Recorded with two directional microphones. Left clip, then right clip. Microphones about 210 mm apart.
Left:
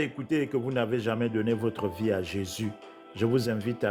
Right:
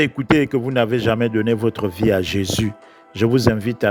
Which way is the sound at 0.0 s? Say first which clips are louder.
Right 12 dB; 35° right (ahead or behind).